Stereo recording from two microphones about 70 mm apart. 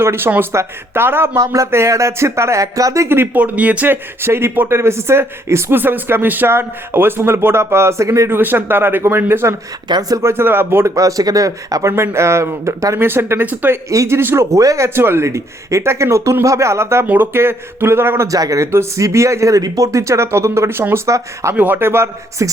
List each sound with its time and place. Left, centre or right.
0.0 s speech: right
3.1 s speech: right
3.4 s speech: right
4.2 s speech: right
8.3 s speech: right
9.9 s speech: right
10.2 s speech: right
10.8 s speech: right
13.9 s speech: right
14.2 s speech: right
14.5 s speech: right
14.8 s speech: right
18.3 s speech: right
18.6 s speech: right